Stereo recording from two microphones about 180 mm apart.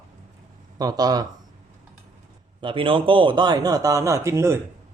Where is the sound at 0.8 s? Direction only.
20° right (ahead or behind).